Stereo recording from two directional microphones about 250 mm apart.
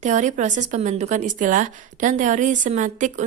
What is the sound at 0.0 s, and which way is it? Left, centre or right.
A woman's voice, right.